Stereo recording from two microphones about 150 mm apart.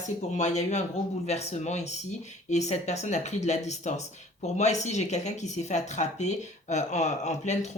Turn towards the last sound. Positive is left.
turn(degrees=50)  # may be behind; listen again after turning